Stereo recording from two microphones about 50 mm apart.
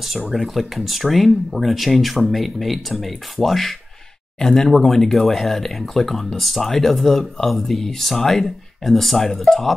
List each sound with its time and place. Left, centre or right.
0.3 s speech: centre